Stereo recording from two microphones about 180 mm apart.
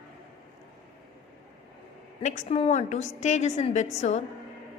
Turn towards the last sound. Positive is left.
turn(degrees=35)  # may be behind; listen again after turning